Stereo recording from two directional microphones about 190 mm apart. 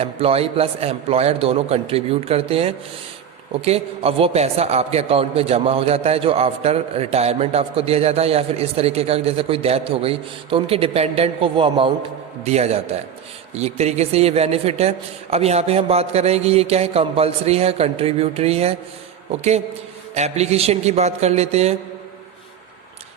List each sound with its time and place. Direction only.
0.0 s a man's voice: 30° right (ahead or behind)